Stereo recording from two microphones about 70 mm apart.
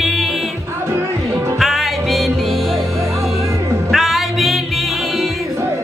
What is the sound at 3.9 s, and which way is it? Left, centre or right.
Music, centre.